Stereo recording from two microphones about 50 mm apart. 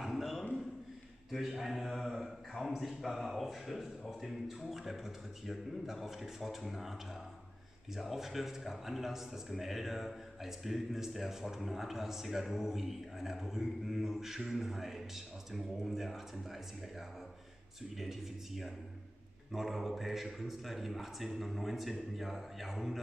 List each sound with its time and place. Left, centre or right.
0.0 s a sound: centre
1.3 s a man's voice: centre
17.9 s a man's voice: centre